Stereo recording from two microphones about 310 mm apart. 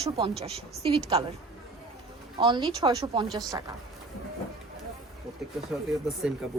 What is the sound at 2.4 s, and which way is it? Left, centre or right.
A woman's voice, centre.